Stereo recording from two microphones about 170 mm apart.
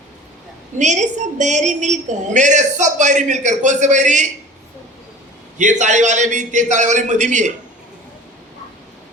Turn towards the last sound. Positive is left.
turn(degrees=-45)  # may be behind; listen again after turning